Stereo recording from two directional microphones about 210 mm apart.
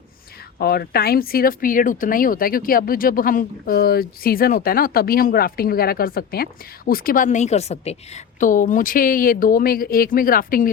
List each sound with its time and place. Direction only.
0.6 s a woman's voice: 45° left (ahead or behind)